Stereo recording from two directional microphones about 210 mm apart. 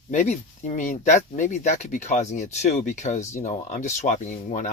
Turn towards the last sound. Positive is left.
turn(degrees=35)  # may be behind; listen again after turning